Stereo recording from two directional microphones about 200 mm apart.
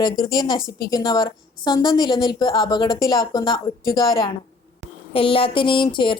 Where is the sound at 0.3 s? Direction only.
20° left (ahead or behind).